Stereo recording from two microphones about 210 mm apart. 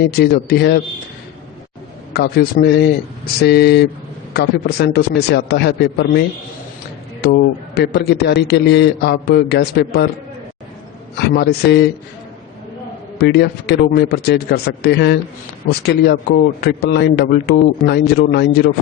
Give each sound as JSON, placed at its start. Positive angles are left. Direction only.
{"t": 0.0, "sound": "a man's voice", "side_deg": 50}
{"t": 2.1, "sound": "a man's voice", "side_deg": 50}
{"t": 7.8, "sound": "a man's voice", "side_deg": 50}
{"t": 11.2, "sound": "a man's voice", "side_deg": 50}
{"t": 13.1, "sound": "a man's voice", "side_deg": 50}